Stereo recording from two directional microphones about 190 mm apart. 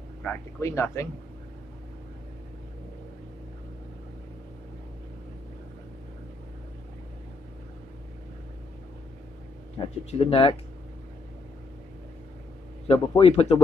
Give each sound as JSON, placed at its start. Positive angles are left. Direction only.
{"t": 0.2, "sound": "speech", "side_deg": 10}
{"t": 10.1, "sound": "speech", "side_deg": 30}
{"t": 12.8, "sound": "speech", "side_deg": 30}